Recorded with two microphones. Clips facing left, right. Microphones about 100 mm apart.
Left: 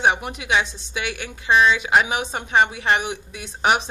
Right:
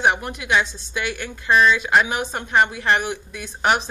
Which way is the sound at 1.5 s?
15° left (ahead or behind).